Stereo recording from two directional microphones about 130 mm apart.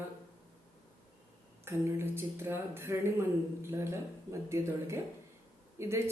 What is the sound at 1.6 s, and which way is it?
Speech, 20° right (ahead or behind).